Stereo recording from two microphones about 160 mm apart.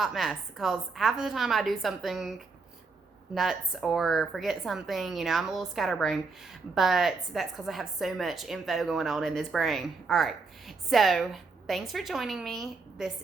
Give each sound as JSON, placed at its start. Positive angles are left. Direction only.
{"t": 0.0, "sound": "a woman's voice", "side_deg": 0}
{"t": 3.3, "sound": "a woman's voice", "side_deg": 0}